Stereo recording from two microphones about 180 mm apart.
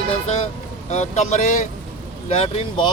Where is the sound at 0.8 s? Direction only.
40° left (ahead or behind).